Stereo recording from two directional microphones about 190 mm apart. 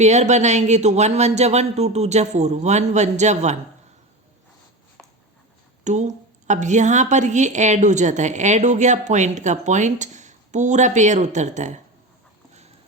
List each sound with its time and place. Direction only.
0.0 s a woman's voice: 35° right (ahead or behind)
5.8 s a woman's voice: 40° right (ahead or behind)